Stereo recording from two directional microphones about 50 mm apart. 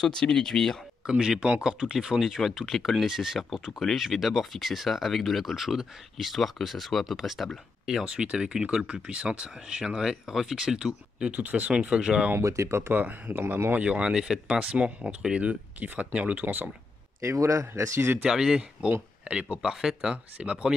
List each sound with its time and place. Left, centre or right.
0.0 s speech: centre
1.0 s speech: centre
8.1 s speech: centre
11.2 s speech: right
12.4 s speech: right
12.9 s speech: right
13.7 s speech: right
14.6 s speech: right
17.2 s speech: right
18.2 s speech: centre
19.6 s speech: centre